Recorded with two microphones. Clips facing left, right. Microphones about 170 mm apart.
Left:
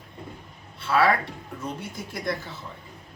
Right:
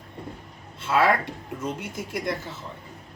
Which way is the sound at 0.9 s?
20° right (ahead or behind).